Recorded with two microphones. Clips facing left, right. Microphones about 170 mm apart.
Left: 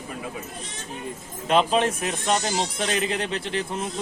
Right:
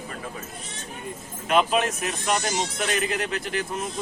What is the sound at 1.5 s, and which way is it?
Speech, 30° left (ahead or behind).